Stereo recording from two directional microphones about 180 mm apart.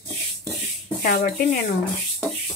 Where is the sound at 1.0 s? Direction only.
50° left (ahead or behind).